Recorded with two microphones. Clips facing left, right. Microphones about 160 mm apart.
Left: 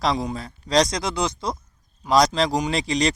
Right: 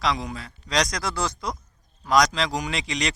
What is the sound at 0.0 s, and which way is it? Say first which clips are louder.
A man's voice: left 3 dB; 35° left (ahead or behind).